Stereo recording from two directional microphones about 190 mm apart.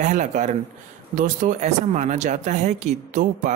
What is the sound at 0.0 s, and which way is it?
Speech, 40° right (ahead or behind).